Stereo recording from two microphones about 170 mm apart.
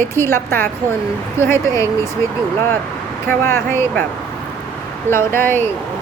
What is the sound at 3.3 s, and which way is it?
Speech, 15° left (ahead or behind).